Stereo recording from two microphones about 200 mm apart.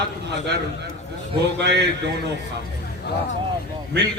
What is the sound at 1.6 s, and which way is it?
Speech, 55° right (ahead or behind).